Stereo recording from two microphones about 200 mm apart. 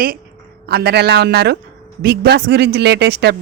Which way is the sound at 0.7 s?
55° right (ahead or behind).